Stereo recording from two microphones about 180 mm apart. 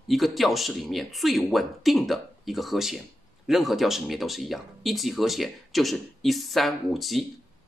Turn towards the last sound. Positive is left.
turn(degrees=0)  # may be behind; listen again after turning